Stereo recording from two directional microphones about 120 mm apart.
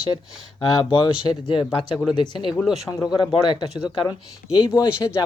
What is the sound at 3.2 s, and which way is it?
Speech, 40° left (ahead or behind).